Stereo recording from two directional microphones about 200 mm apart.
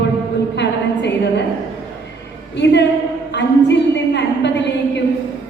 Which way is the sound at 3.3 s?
60° left (ahead or behind).